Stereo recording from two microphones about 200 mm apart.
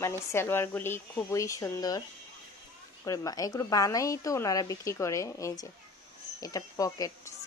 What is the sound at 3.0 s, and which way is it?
A woman's voice, 15° left (ahead or behind).